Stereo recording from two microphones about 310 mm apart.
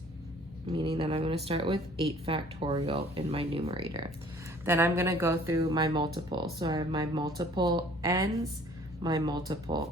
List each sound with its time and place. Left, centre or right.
0.7 s speech: centre